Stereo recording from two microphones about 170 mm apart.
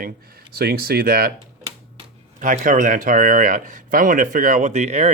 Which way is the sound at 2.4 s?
50° right (ahead or behind).